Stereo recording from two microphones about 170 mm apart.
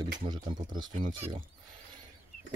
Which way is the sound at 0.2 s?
30° right (ahead or behind).